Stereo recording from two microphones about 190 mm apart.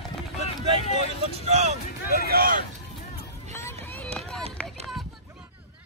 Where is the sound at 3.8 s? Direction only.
10° left (ahead or behind).